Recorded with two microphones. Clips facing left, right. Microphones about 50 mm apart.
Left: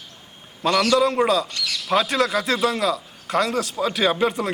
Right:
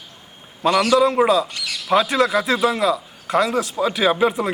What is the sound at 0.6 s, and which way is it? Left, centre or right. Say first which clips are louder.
Speech: right 3 dB; centre.